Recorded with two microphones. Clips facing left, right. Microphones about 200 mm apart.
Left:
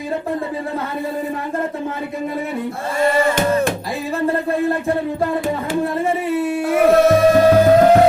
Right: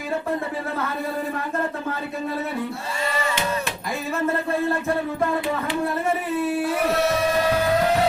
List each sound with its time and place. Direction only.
3.0 s music: 50° left (ahead or behind)
6.8 s music: 50° left (ahead or behind)